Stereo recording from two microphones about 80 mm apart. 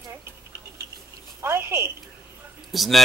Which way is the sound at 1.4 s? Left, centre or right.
Right.